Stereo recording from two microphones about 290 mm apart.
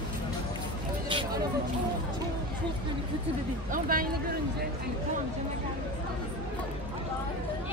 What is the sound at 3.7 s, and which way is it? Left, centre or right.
Speech, right.